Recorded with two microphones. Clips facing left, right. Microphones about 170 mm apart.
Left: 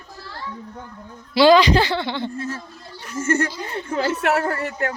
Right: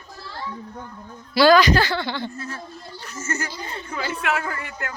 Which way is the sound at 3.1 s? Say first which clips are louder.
Left 9 dB; 60° left (ahead or behind).